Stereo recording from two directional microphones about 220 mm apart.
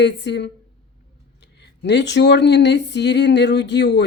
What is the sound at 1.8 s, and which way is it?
Speech, 50° left (ahead or behind).